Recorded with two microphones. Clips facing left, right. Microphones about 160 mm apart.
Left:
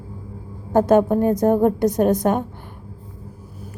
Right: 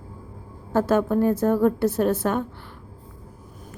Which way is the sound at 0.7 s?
15° left (ahead or behind).